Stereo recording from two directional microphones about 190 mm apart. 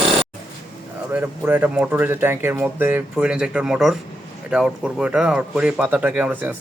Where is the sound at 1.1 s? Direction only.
10° right (ahead or behind).